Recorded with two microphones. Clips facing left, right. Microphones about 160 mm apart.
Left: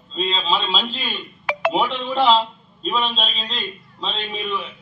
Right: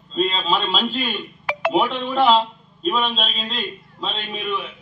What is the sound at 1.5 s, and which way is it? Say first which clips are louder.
Music: left 2 dB; 70° left (ahead or behind).